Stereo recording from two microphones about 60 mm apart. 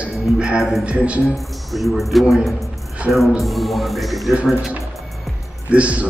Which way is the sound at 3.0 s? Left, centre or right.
Right.